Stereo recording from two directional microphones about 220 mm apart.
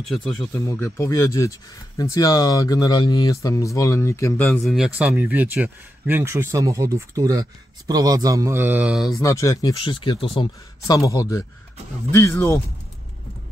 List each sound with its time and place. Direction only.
0.0 s speech: centre (ahead or behind)
0.5 s speech: 10° left (ahead or behind)
9.2 s a man's voice: 15° left (ahead or behind)